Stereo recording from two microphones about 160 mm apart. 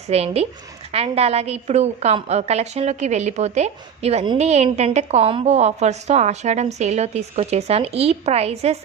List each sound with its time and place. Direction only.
0.1 s a woman's voice: 40° right (ahead or behind)